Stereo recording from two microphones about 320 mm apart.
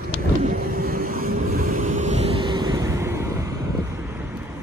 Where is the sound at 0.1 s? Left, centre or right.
Right; by 4.2 s centre.